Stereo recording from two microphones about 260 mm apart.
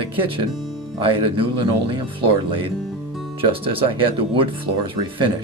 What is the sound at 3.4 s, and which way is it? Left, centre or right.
Speech, right.